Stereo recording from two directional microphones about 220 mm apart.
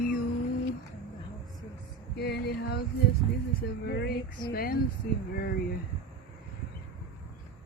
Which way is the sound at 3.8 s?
50° left (ahead or behind).